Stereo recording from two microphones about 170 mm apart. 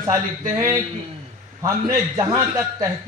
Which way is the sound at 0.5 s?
20° right (ahead or behind).